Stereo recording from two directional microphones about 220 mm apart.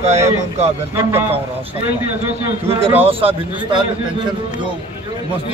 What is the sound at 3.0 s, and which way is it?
Speech, 25° right (ahead or behind).